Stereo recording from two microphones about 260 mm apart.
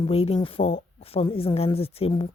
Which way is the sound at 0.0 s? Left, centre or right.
Left.